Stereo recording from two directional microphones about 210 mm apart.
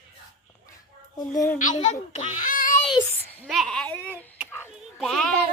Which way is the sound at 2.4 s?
40° left (ahead or behind).